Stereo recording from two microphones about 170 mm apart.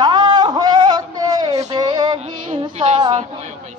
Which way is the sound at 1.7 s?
25° right (ahead or behind).